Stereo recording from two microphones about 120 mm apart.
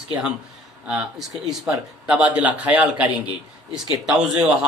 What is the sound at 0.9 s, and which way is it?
Speech, 5° right (ahead or behind).